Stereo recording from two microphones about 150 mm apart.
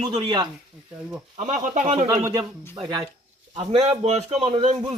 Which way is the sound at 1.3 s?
55° right (ahead or behind).